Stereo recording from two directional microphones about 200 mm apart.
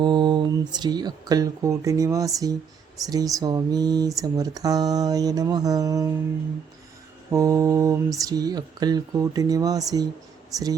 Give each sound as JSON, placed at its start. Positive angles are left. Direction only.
{"t": 0.0, "sound": "speech", "side_deg": -20}
{"t": 7.3, "sound": "mantra", "side_deg": -15}
{"t": 10.5, "sound": "speech", "side_deg": -20}